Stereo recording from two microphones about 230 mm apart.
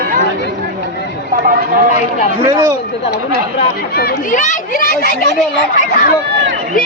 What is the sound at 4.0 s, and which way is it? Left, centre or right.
Speech, left.